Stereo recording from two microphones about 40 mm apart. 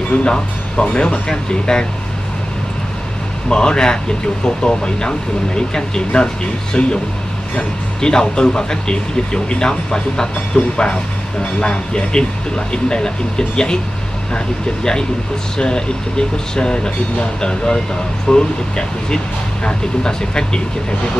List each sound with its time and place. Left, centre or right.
0.1 s speech: left
3.4 s speech: left